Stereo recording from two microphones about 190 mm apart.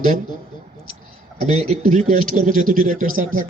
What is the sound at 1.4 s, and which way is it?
Speech, 35° right (ahead or behind).